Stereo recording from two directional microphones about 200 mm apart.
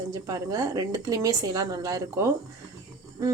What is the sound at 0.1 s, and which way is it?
A woman's voice, 20° right (ahead or behind).